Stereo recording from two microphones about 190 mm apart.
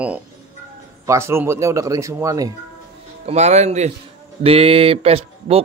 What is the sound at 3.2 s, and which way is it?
Speech, 35° right (ahead or behind).